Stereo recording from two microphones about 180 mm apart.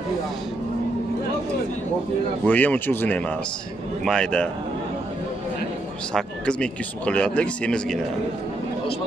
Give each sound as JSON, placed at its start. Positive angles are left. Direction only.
{"t": 2.4, "sound": "speech", "side_deg": 10}
{"t": 6.1, "sound": "speech", "side_deg": 5}